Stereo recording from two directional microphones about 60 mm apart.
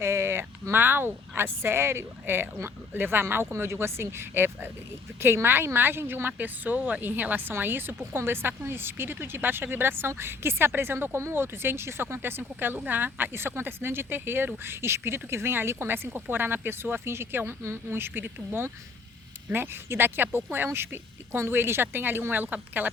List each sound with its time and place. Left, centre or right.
0.0 s a woman's voice: right